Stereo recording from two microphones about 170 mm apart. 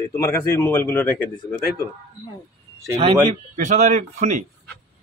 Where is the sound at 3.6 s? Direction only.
45° right (ahead or behind).